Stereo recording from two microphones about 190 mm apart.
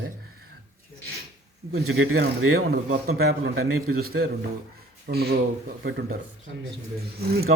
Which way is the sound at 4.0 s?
55° right (ahead or behind).